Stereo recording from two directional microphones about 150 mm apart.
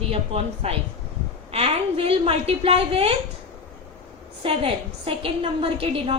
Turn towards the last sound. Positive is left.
turn(degrees=-40)  # may be behind; listen again after turning